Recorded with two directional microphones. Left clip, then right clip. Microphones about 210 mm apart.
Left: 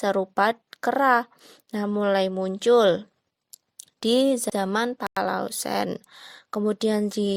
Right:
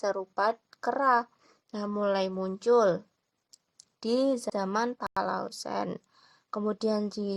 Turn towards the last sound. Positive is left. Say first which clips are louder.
# left 6 dB
turn(degrees=30)  # may be behind; listen again after turning